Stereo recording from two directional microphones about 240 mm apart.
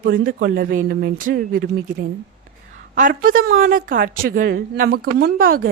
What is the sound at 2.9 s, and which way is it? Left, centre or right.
A woman's voice, right.